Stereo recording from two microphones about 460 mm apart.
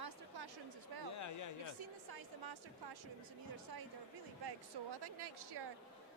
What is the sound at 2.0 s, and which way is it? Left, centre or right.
Speech, right.